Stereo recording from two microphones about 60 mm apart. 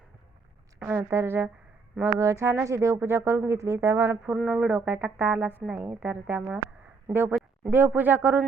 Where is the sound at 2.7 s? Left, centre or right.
Right.